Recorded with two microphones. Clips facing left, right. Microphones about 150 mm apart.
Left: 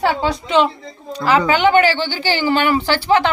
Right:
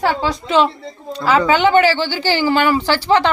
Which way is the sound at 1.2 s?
15° left (ahead or behind).